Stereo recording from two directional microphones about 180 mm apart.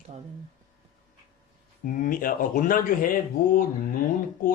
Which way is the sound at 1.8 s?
50° left (ahead or behind).